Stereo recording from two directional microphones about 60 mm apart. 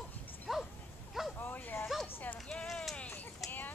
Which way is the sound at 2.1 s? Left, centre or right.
Left.